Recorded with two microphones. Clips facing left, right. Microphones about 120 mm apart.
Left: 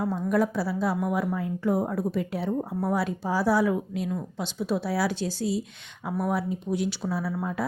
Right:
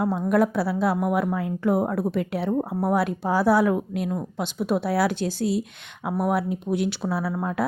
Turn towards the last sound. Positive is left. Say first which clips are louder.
# right 3 dB
turn(degrees=-65)  # may be behind; listen again after turning